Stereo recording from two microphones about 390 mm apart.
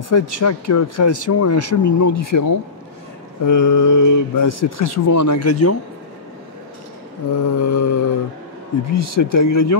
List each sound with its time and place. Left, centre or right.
0.1 s speech: left
7.3 s mantra: left
8.9 s speech: left